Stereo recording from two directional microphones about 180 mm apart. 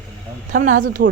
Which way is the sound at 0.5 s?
45° right (ahead or behind).